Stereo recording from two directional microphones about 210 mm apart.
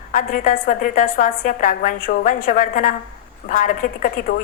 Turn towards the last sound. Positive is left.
turn(degrees=45)  # may be behind; listen again after turning